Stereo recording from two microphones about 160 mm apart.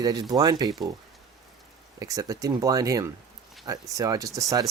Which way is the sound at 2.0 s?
20° right (ahead or behind).